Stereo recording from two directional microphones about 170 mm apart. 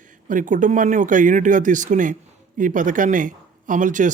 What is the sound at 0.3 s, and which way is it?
Speech, 50° right (ahead or behind).